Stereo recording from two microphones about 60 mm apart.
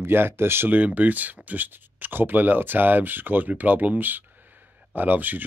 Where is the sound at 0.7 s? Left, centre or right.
Right.